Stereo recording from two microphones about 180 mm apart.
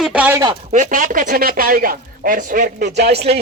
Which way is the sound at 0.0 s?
5° right (ahead or behind).